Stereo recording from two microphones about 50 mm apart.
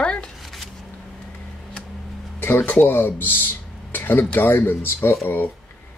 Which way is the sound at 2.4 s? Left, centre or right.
Left.